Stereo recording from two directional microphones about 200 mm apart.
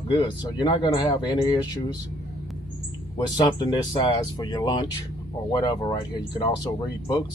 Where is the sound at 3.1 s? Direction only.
20° left (ahead or behind).